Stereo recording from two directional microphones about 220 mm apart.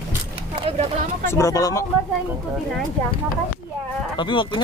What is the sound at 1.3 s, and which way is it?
Speech, 15° left (ahead or behind).